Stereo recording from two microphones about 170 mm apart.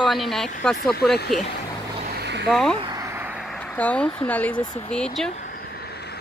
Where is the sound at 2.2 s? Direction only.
85° right.